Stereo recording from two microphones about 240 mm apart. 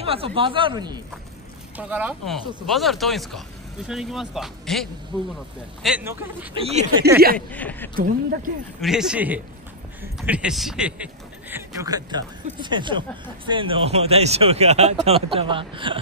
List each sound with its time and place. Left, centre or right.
0.0 s speech: right
1.8 s speech: centre
6.5 s speech: right
7.1 s speech: right
7.3 s speech: centre
7.9 s speech: right
8.8 s speech: centre; by 16.0 s right